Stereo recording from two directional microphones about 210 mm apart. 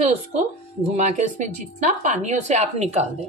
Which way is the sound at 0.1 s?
35° right (ahead or behind).